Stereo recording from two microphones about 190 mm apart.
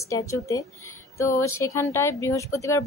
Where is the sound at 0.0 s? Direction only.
15° left (ahead or behind).